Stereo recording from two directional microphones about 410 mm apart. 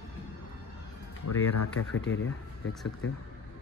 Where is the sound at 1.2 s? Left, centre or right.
Left.